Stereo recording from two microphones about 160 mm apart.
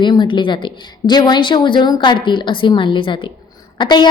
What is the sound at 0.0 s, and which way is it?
A woman's voice, 30° left (ahead or behind).